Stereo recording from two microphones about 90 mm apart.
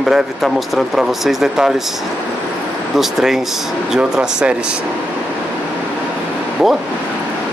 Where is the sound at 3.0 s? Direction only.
5° right (ahead or behind).